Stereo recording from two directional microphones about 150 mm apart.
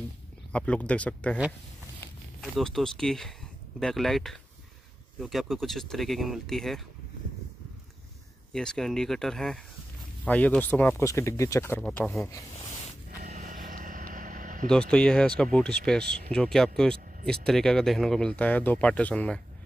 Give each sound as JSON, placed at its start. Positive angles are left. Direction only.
{"t": 0.5, "sound": "speech", "side_deg": 10}
{"t": 2.4, "sound": "speech", "side_deg": 0}
{"t": 8.5, "sound": "speech", "side_deg": 5}
{"t": 11.7, "sound": "speech", "side_deg": 10}
{"t": 13.4, "sound": "vehicle", "side_deg": -65}
{"t": 14.7, "sound": "speech", "side_deg": 5}